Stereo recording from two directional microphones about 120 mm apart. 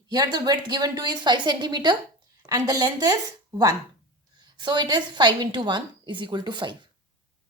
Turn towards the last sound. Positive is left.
turn(degrees=-40)  # may be behind; listen again after turning